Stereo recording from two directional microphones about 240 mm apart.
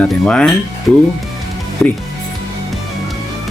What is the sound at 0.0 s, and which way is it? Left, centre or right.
Speech, centre.